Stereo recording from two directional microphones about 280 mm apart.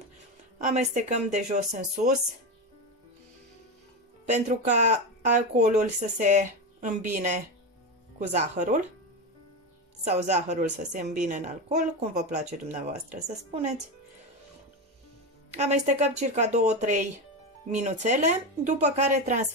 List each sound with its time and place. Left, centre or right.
0.6 s a woman's voice: right
4.3 s a woman's voice: right
10.0 s a woman's voice: right
15.5 s a woman's voice: right